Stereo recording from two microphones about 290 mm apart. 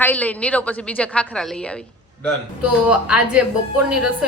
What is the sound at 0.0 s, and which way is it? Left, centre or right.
A woman's voice, centre.